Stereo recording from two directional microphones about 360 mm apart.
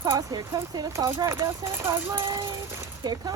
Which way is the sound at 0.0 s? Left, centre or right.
Centre.